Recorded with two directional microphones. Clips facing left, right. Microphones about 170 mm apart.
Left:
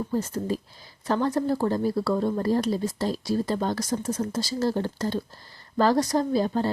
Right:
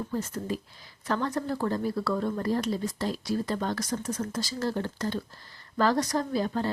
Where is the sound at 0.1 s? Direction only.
30° left (ahead or behind).